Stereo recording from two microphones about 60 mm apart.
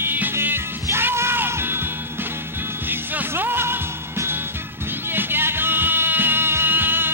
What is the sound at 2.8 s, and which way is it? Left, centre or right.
Music, right.